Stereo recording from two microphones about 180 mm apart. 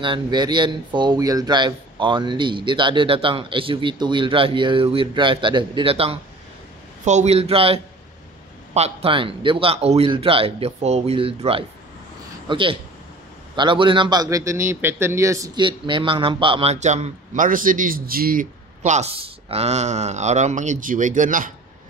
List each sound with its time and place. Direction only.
0.0 s a man's voice: 25° right (ahead or behind); by 21.5 s 45° right (ahead or behind)